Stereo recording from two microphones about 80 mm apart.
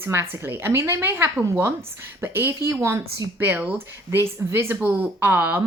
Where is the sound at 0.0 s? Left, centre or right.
Right.